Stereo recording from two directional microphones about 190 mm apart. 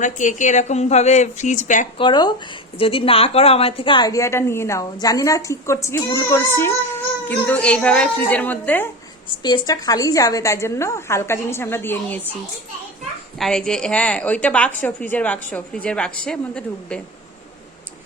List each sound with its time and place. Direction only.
0.0 s speech: 40° left (ahead or behind)
2.0 s a woman's voice: 25° left (ahead or behind)
9.4 s a woman's voice: 20° left (ahead or behind)
13.4 s a woman's voice: 5° left (ahead or behind)